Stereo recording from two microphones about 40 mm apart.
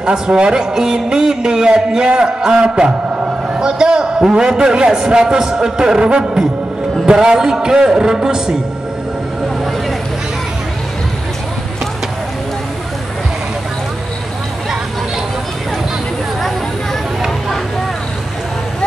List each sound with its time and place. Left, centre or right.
0.0 s a man's voice: centre